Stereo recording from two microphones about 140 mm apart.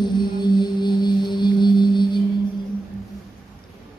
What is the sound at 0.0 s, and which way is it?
Music, 30° left (ahead or behind).